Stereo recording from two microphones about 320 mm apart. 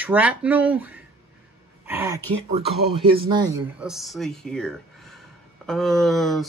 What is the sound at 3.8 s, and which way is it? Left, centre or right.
Speech, centre.